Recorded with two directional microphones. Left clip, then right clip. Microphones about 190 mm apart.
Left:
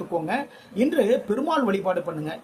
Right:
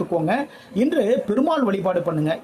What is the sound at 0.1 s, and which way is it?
A man's voice, 30° right (ahead or behind).